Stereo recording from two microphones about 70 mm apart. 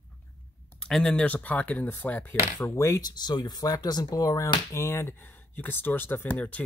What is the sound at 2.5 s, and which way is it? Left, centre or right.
Speech, left.